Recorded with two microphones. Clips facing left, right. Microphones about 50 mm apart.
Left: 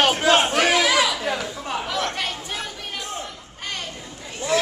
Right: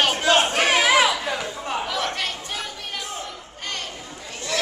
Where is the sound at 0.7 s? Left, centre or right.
Right.